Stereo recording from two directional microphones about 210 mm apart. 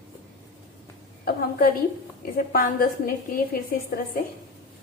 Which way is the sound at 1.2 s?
45° left (ahead or behind).